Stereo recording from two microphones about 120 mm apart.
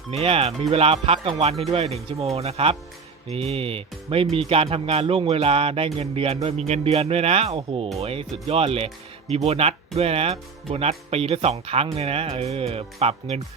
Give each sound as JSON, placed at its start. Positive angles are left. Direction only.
{"t": 0.1, "sound": "speech", "side_deg": -55}